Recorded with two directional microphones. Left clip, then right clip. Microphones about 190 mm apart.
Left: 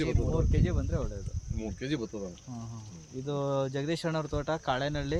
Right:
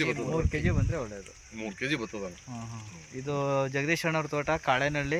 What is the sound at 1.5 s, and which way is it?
Speech, 15° left (ahead or behind).